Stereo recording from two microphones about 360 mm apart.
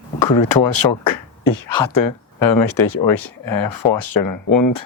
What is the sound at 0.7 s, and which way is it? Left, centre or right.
Speech, left.